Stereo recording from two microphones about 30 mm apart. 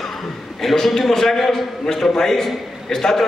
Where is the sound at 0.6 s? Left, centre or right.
Centre.